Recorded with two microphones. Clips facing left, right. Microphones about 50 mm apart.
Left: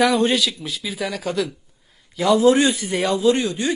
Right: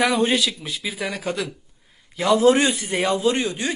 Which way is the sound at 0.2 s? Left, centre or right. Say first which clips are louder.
Left 1 dB; right.